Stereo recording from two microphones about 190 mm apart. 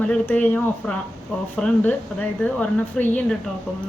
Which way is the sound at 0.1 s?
5° left (ahead or behind).